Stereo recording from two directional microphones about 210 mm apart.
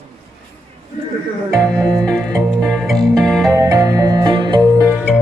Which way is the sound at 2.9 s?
Centre (ahead or behind).